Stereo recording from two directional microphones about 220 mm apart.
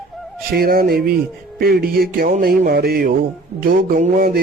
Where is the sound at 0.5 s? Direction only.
40° right (ahead or behind).